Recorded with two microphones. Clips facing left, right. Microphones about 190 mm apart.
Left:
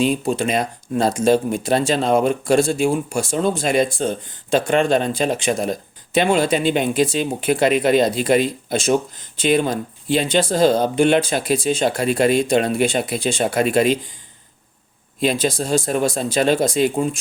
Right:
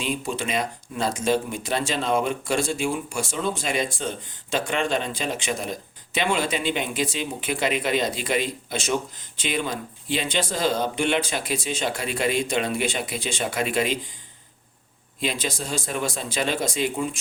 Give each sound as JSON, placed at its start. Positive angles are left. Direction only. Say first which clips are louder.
{"t": 0.0, "sound": "speech", "louder": "left 9 dB", "side_deg": 35}
{"t": 15.2, "sound": "speech", "louder": "left 9 dB", "side_deg": 40}